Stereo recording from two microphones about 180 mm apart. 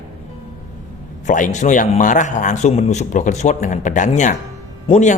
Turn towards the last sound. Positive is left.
turn(degrees=40)  # may be behind; listen again after turning